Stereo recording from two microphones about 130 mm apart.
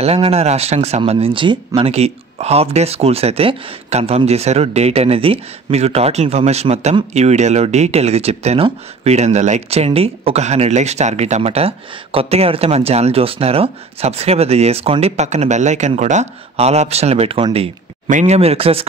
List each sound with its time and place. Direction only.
0.0 s speech: 50° right (ahead or behind)
1.8 s speech: 50° right (ahead or behind)